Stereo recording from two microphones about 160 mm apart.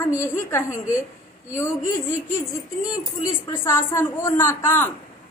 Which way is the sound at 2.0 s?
20° left (ahead or behind).